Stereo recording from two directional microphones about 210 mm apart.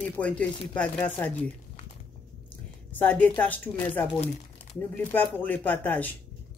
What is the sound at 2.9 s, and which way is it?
A woman's voice, 10° left (ahead or behind).